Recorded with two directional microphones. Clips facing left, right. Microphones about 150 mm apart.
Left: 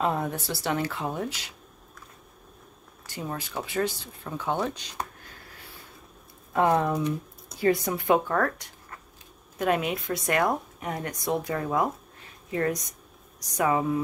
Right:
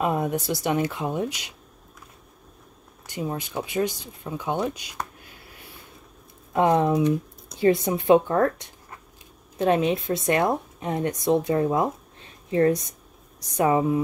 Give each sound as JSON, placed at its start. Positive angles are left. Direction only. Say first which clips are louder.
{"t": 0.0, "sound": "speech", "louder": "right 3 dB", "side_deg": -15}
{"t": 3.1, "sound": "speech", "louder": "right 5 dB", "side_deg": -20}
{"t": 6.5, "sound": "a woman's voice", "louder": "right 3 dB", "side_deg": -20}